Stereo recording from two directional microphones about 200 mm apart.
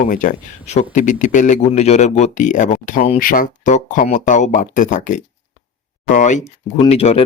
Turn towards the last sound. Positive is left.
turn(degrees=30)  # may be behind; listen again after turning